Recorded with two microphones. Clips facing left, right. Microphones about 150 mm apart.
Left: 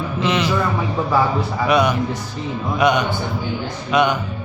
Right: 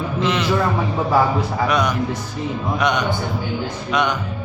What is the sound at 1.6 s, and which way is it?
A man's voice, 5° left (ahead or behind).